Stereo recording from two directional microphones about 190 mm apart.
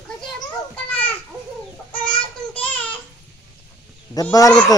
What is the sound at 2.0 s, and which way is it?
Child singing, 5° left (ahead or behind).